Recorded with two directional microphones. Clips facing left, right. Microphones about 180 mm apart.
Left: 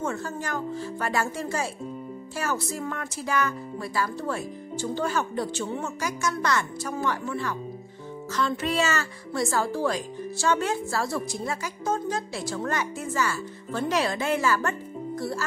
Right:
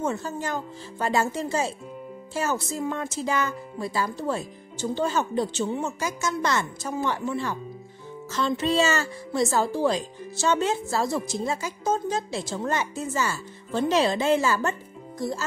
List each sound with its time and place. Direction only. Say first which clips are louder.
0.0 s speech: right 2 dB; 20° right (ahead or behind)